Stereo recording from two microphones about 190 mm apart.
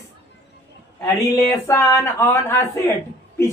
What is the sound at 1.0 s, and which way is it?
A woman's voice, 15° left (ahead or behind).